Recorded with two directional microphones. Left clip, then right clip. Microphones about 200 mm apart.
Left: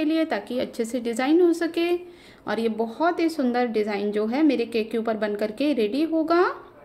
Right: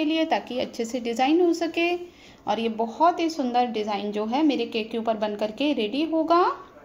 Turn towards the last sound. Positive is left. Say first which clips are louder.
# even
turn(degrees=20)  # may be behind; listen again after turning